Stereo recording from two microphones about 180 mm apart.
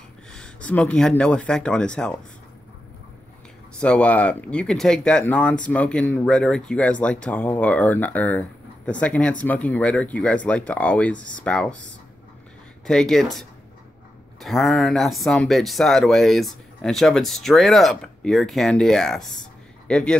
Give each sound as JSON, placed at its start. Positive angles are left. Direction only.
{"t": 0.3, "sound": "speech", "side_deg": 5}
{"t": 3.8, "sound": "speech", "side_deg": 5}
{"t": 12.8, "sound": "speech", "side_deg": 5}